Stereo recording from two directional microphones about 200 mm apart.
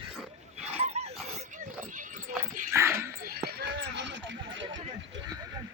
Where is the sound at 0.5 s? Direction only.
35° right (ahead or behind).